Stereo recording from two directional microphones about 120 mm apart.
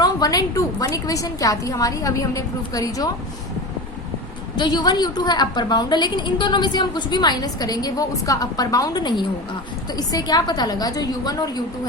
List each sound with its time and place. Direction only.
0.0 s a woman's voice: 30° left (ahead or behind)
4.5 s a woman's voice: 35° left (ahead or behind)